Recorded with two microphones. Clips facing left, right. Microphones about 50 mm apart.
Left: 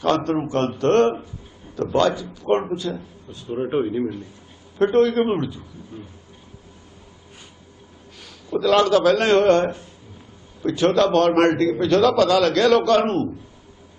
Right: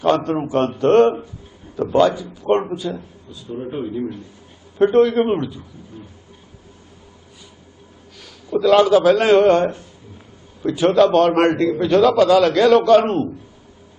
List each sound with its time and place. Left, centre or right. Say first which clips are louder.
0.3 s a man's voice: right 2 dB; centre
3.3 s speech: left 4 dB; left
4.8 s a man's voice: right 3 dB; centre
8.5 s a man's voice: right 4 dB; centre